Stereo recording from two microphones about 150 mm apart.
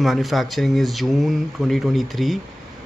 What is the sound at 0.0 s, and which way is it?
A man's voice, centre (ahead or behind).